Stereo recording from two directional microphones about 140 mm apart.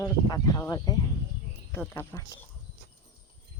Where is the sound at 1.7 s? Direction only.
15° left (ahead or behind).